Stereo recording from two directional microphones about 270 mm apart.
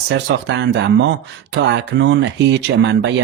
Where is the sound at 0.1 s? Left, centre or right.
Right.